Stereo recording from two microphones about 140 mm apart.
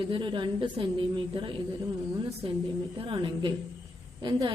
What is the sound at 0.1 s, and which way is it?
A woman's voice, 35° right (ahead or behind).